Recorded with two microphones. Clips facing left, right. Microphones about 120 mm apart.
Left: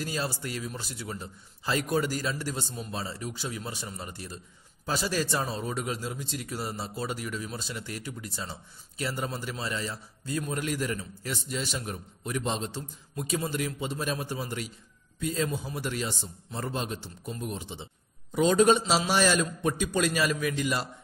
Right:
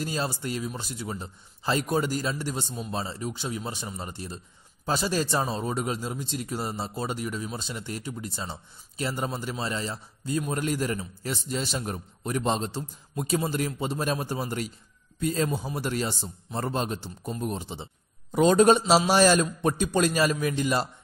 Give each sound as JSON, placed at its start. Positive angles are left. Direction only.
{"t": 0.0, "sound": "a man's voice", "side_deg": -25}
{"t": 18.3, "sound": "a man's voice", "side_deg": -50}
{"t": 18.9, "sound": "a man's voice", "side_deg": -35}